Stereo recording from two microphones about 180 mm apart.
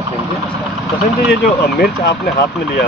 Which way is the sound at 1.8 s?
60° left (ahead or behind).